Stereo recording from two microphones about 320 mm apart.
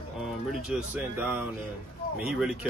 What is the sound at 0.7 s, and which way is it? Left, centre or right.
Speech, centre.